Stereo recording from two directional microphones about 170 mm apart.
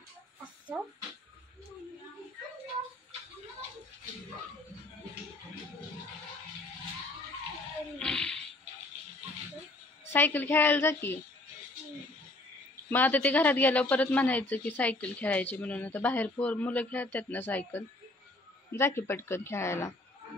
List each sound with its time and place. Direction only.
8.0 s a sound: 5° left (ahead or behind)
10.1 s speech: 10° left (ahead or behind)
12.9 s speech: 10° left (ahead or behind)